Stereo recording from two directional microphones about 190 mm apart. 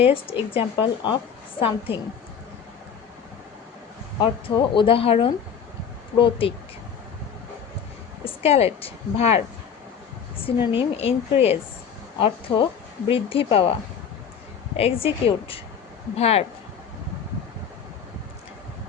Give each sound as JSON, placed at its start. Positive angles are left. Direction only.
{"t": 0.0, "sound": "a woman's voice", "side_deg": 30}
{"t": 4.2, "sound": "a woman's voice", "side_deg": 25}
{"t": 8.2, "sound": "a woman's voice", "side_deg": 30}
{"t": 10.4, "sound": "a woman's voice", "side_deg": 30}
{"t": 14.8, "sound": "a woman's voice", "side_deg": 30}